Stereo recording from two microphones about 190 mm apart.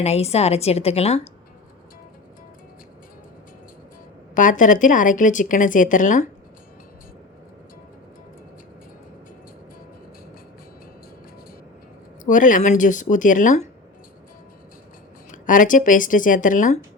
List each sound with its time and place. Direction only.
0.0 s a woman's voice: 35° left (ahead or behind)
4.4 s speech: 45° left (ahead or behind)
12.2 s speech: 45° left (ahead or behind)
15.3 s speech: 45° left (ahead or behind)